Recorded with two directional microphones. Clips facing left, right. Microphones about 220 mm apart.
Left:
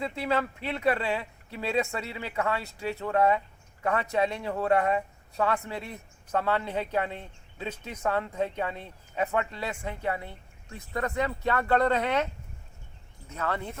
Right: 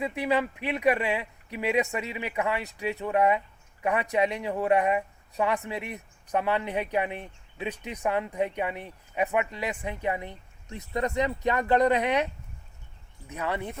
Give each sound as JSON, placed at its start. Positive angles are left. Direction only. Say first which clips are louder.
{"t": 0.0, "sound": "speech", "louder": "right 2 dB", "side_deg": -15}